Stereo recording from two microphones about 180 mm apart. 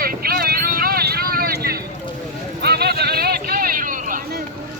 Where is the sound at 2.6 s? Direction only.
60° right (ahead or behind).